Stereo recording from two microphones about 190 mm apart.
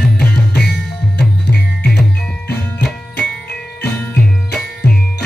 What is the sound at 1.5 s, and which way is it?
Music, 60° left (ahead or behind).